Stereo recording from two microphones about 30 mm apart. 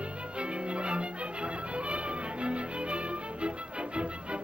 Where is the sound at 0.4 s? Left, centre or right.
Right.